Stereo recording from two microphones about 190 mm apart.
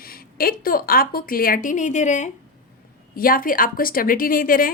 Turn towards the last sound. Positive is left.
turn(degrees=50)  # may be behind; listen again after turning